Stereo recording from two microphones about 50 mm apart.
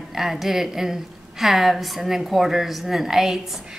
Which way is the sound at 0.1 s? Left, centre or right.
Centre.